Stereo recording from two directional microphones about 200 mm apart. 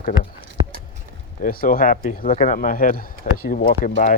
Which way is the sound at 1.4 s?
45° left (ahead or behind).